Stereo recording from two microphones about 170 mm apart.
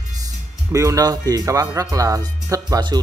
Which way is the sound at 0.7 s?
20° right (ahead or behind).